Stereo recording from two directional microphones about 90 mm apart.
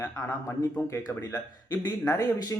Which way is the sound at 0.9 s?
45° left (ahead or behind).